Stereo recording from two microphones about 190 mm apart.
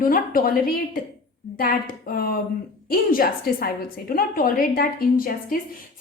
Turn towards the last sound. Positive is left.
turn(degrees=50)  # may be behind; listen again after turning